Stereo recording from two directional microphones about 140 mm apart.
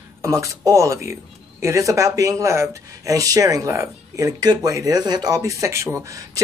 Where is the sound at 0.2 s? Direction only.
20° right (ahead or behind).